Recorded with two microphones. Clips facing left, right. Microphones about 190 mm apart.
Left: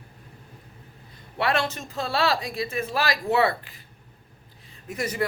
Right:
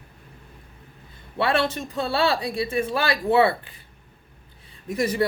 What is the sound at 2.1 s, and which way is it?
Speech, 30° right (ahead or behind).